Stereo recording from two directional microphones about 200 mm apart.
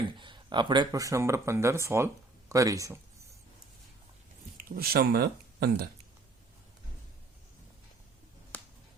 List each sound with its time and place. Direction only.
0.2 s speech: 25° right (ahead or behind)
4.5 s speech: 45° right (ahead or behind)